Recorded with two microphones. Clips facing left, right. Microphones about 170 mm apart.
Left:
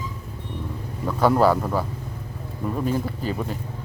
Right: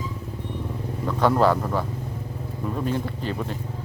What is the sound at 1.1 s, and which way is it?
Speech, 5° left (ahead or behind).